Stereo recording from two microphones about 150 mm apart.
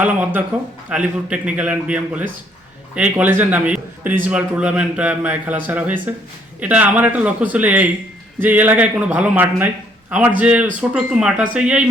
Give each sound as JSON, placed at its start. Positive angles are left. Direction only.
{"t": 0.0, "sound": "a man's voice", "side_deg": -10}